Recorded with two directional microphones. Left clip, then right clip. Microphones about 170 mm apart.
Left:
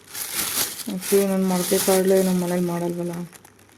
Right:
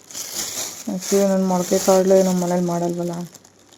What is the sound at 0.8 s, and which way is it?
Speech, 10° right (ahead or behind).